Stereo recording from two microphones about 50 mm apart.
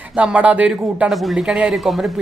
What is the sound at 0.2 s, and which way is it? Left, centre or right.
Speech, right.